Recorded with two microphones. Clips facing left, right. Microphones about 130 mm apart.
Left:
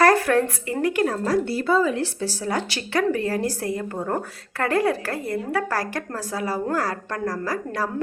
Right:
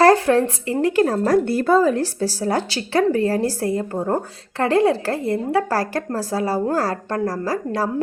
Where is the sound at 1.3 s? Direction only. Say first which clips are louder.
Right 5 dB; 50° right (ahead or behind).